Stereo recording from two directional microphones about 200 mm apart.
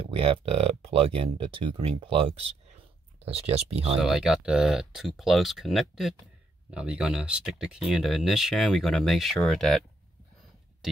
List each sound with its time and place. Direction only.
0.0 s speech: 30° right (ahead or behind)
4.0 s speech: centre (ahead or behind)